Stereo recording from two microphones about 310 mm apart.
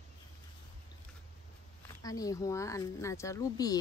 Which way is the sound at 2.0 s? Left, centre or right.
Centre.